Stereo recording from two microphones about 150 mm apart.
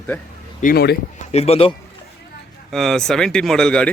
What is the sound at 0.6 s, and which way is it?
Speech, 85° left.